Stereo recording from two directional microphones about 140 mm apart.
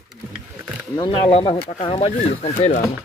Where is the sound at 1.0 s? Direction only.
45° left (ahead or behind).